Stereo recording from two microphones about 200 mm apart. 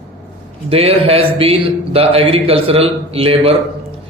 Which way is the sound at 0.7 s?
30° right (ahead or behind).